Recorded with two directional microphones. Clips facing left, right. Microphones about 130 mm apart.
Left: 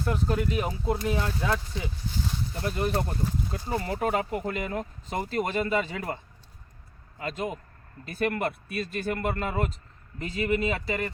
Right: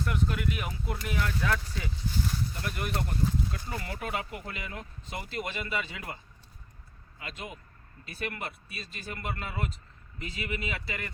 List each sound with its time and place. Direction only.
0.0 s speech: 30° left (ahead or behind)
2.6 s speech: 30° left (ahead or behind)
7.2 s speech: 40° left (ahead or behind)